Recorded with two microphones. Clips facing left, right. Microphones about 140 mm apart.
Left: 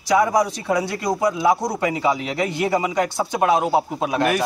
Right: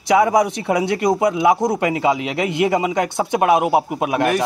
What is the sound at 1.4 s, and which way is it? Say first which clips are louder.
A man's voice: right 3 dB; 20° right (ahead or behind).